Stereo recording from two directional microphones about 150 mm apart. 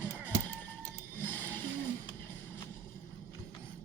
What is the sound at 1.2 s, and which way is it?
Music, 15° left (ahead or behind).